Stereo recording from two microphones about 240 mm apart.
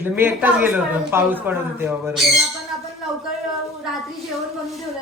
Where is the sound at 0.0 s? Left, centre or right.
Centre.